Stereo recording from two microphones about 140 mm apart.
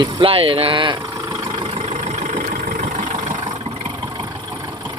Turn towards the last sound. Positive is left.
turn(degrees=-30)  # may be behind; listen again after turning